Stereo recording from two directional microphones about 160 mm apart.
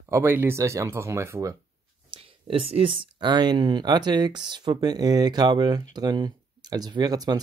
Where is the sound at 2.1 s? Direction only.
35° right (ahead or behind).